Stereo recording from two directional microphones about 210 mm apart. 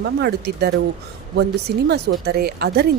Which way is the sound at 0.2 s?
50° right (ahead or behind).